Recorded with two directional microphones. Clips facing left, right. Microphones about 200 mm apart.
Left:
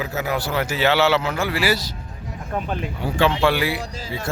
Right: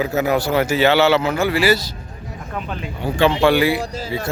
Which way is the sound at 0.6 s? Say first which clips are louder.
Right 2 dB; centre (ahead or behind).